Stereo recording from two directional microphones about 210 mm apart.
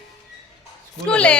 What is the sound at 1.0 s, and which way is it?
Speech, 5° left (ahead or behind).